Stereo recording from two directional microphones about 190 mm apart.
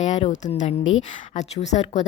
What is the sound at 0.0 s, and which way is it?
A woman's voice, 40° left (ahead or behind).